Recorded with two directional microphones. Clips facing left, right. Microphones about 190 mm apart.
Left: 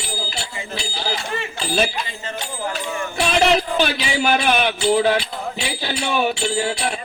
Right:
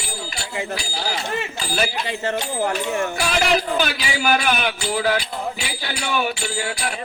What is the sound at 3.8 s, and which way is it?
Music, 25° left (ahead or behind).